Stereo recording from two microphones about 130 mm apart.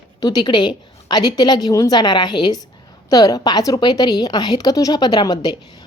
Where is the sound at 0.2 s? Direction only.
30° left (ahead or behind).